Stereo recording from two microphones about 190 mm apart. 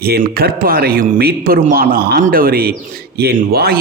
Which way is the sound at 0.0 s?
55° right (ahead or behind).